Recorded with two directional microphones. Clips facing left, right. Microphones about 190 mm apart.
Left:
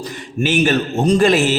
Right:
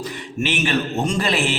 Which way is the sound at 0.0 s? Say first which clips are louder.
Left 4 dB; 40° left (ahead or behind).